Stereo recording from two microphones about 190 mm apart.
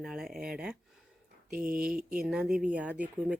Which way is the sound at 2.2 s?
5° right (ahead or behind).